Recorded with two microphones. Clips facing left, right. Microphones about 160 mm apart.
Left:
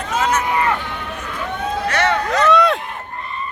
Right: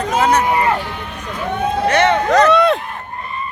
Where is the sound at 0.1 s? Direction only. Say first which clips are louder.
Right 4 dB; 35° right (ahead or behind).